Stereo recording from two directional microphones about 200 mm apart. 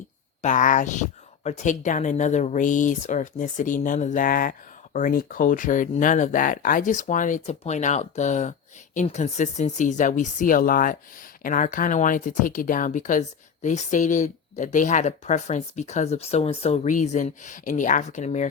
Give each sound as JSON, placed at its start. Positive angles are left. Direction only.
{"t": 0.4, "sound": "speech", "side_deg": 40}